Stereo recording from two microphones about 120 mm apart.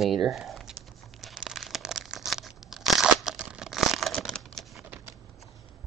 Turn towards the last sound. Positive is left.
turn(degrees=5)  # may be behind; listen again after turning